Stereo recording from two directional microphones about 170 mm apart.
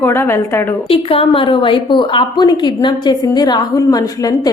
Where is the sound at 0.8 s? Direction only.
35° left (ahead or behind).